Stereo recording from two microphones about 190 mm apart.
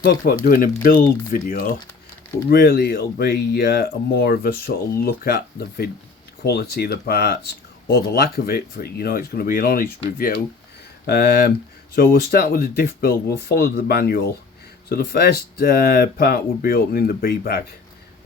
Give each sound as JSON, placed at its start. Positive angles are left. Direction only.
{"t": 0.0, "sound": "speech", "side_deg": 55}